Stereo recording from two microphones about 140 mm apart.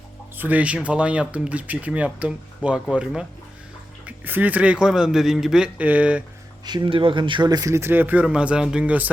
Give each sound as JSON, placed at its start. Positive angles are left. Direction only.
{"t": 0.3, "sound": "speech", "side_deg": -10}
{"t": 6.7, "sound": "speech", "side_deg": -35}